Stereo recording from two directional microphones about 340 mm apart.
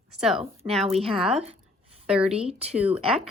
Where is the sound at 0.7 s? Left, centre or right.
Centre.